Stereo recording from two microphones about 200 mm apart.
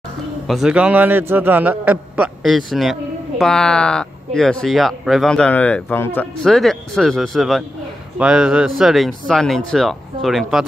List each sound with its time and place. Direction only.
0.5 s a man's voice: centre (ahead or behind)